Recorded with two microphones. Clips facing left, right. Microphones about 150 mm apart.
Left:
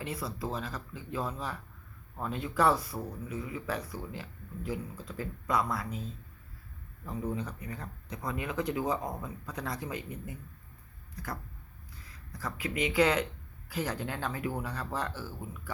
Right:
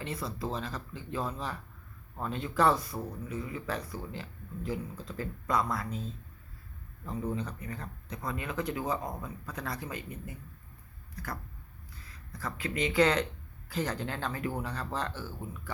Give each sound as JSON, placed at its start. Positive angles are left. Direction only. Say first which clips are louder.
{"t": 0.0, "sound": "speech", "louder": "even", "side_deg": 10}